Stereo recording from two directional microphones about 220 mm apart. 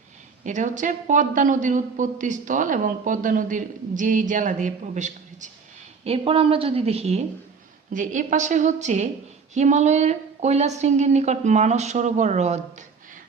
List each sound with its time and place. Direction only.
0.4 s a man's voice: 35° right (ahead or behind)